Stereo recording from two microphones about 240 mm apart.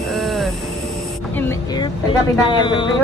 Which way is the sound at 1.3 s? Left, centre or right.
Centre.